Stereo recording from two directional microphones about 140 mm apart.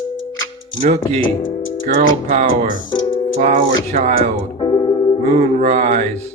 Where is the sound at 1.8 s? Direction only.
75° right (ahead or behind).